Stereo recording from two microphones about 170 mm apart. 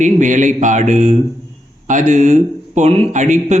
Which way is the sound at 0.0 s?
45° right (ahead or behind).